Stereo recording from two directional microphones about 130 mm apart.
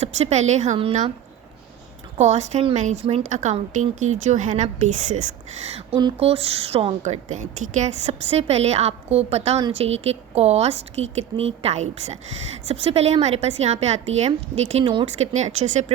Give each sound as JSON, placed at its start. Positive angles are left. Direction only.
{"t": 0.0, "sound": "a woman's voice", "side_deg": -60}
{"t": 2.1, "sound": "a woman's voice", "side_deg": -60}
{"t": 7.0, "sound": "a woman's voice", "side_deg": -70}